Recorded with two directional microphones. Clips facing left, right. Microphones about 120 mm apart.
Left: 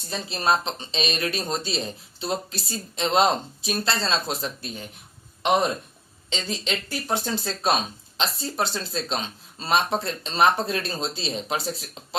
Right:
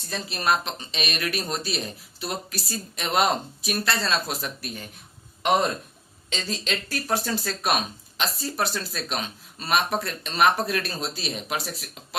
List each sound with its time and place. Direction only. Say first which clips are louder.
0.1 s speech: left 1 dB; 25° left (ahead or behind)
6.3 s speech: left 1 dB; 20° left (ahead or behind)